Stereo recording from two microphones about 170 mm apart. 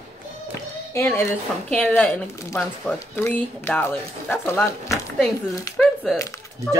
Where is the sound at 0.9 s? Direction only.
15° left (ahead or behind).